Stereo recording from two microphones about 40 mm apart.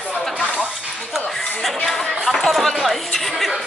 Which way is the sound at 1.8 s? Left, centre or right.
Centre.